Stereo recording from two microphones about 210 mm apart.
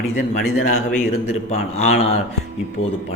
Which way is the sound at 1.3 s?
30° left (ahead or behind).